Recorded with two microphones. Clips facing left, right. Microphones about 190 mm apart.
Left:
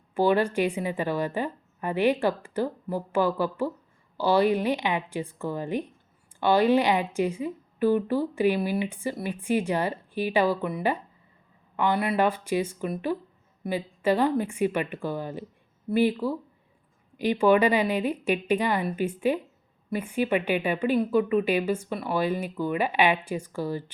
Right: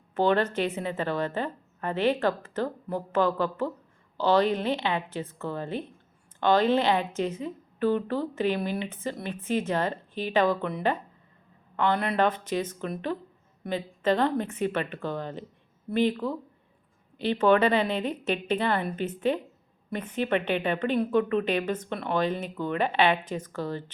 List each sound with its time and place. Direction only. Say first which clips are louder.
0.1 s a woman's voice: left 1 dB; 10° left (ahead or behind)